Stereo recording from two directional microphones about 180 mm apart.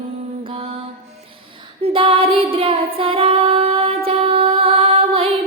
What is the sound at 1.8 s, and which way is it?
Female singing, 30° right (ahead or behind).